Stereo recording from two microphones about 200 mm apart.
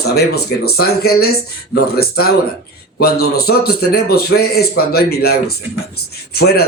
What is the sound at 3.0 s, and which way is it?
A man's voice, 50° left (ahead or behind).